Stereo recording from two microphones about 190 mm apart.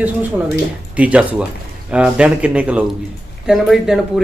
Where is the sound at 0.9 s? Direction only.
5° right (ahead or behind).